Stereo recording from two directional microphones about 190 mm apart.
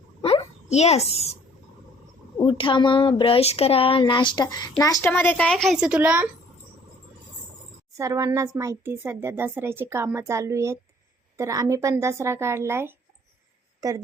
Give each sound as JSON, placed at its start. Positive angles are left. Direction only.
{"t": 0.2, "sound": "a sound", "side_deg": 30}
{"t": 2.4, "sound": "a child's voice", "side_deg": 25}
{"t": 7.9, "sound": "a woman's voice", "side_deg": -15}